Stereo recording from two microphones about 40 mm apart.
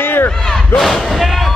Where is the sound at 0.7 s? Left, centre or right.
Centre.